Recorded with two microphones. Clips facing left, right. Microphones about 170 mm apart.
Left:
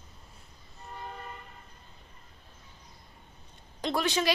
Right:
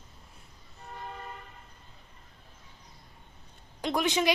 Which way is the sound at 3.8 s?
15° right (ahead or behind).